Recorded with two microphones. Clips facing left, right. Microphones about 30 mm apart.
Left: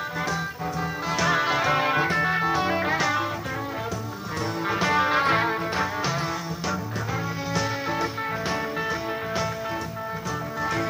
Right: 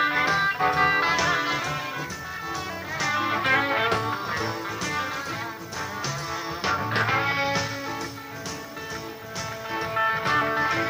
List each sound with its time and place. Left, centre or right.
0.0 s music: right
0.6 s music: right
1.1 s music: centre
1.6 s music: left
3.7 s music: right
5.1 s music: left
9.9 s music: right
10.6 s music: centre